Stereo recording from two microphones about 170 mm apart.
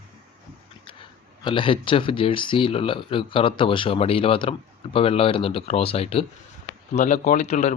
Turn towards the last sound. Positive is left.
turn(degrees=40)  # may be behind; listen again after turning